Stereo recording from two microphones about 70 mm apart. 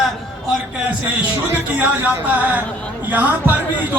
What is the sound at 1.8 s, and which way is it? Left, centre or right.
A man's voice, right.